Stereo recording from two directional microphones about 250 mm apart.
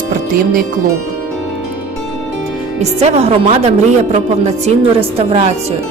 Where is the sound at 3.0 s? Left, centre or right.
Right.